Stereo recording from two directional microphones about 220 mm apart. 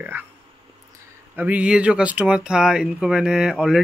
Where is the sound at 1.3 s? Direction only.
5° right (ahead or behind).